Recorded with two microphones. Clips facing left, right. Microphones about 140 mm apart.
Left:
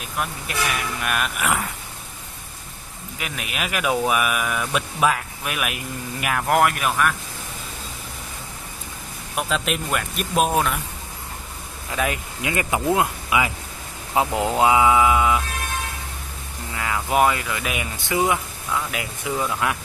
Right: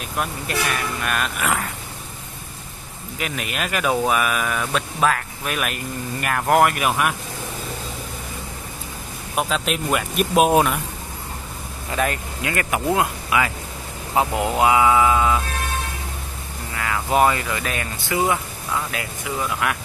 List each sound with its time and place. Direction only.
0.2 s speech: 5° left (ahead or behind)
3.2 s speech: 5° left (ahead or behind)
9.5 s speech: centre (ahead or behind)
10.5 s speech: 15° right (ahead or behind)
11.9 s speech: 5° left (ahead or behind)
12.4 s speech: 20° left (ahead or behind)
14.1 s speech: 15° right (ahead or behind)
14.7 s speech: 15° left (ahead or behind)
16.7 s speech: 20° left (ahead or behind)
17.1 s speech: 5° left (ahead or behind)
18.1 s speech: 20° left (ahead or behind)
19.6 s speech: 25° left (ahead or behind)